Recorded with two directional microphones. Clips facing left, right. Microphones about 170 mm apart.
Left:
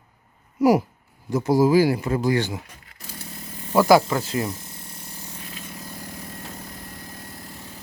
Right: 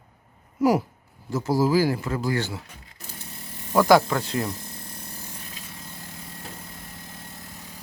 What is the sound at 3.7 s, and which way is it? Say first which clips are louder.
Speech: left 1 dB; 5° left (ahead or behind).